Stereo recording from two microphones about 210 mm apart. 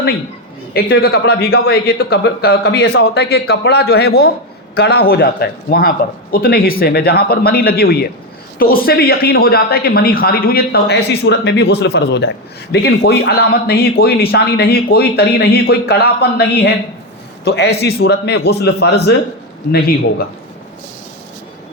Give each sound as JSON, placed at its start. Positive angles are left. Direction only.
{"t": 0.7, "sound": "speech", "side_deg": 50}